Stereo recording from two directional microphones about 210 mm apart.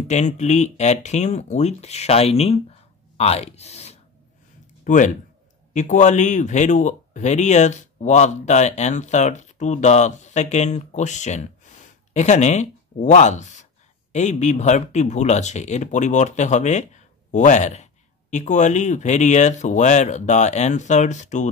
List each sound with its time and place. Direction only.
0.1 s speech: 35° left (ahead or behind)